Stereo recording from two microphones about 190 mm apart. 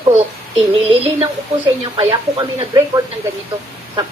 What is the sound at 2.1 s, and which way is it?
Speech, 20° right (ahead or behind).